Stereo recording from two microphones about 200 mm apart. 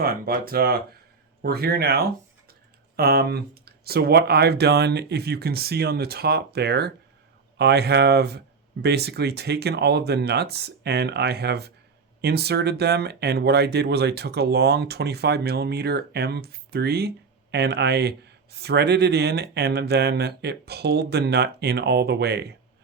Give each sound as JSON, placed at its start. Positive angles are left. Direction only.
{"t": 0.0, "sound": "speech", "side_deg": -50}